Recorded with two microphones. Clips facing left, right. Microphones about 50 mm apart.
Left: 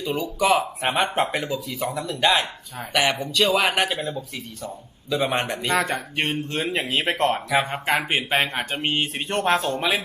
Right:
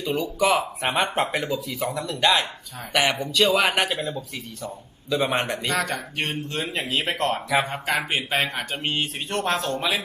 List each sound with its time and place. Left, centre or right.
0.0 s speech: centre
6.7 s speech: centre